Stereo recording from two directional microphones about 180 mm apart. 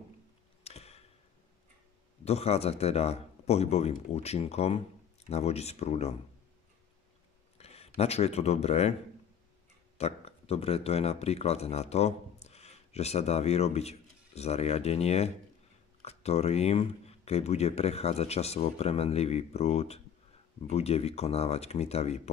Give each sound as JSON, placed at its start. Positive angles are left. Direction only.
{"t": 0.7, "sound": "arrow", "side_deg": 35}
{"t": 2.2, "sound": "speech", "side_deg": 35}
{"t": 7.5, "sound": "speech", "side_deg": 35}
{"t": 9.9, "sound": "speech", "side_deg": 35}